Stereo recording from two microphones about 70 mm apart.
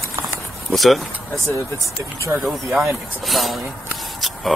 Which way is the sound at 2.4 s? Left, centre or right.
Right.